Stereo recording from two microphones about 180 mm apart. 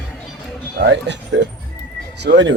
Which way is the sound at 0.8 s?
75° right (ahead or behind).